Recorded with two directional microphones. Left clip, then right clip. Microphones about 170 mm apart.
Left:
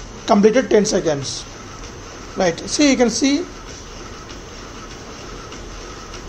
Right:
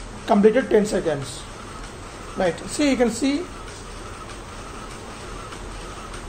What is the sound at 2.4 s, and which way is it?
Speech, 35° left (ahead or behind).